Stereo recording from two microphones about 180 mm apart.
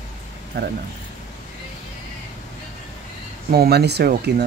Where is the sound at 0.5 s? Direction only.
70° right (ahead or behind).